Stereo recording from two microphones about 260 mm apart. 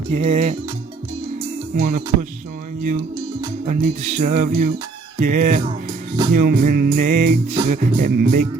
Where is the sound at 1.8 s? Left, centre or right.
Right.